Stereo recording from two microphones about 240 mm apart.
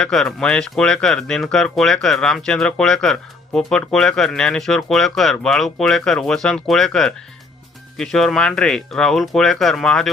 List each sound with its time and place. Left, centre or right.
0.0 s speech: centre